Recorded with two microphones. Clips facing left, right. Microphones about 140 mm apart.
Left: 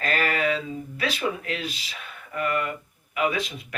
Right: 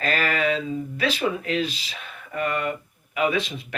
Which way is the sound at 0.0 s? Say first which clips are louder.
Right 1 dB; 25° right (ahead or behind).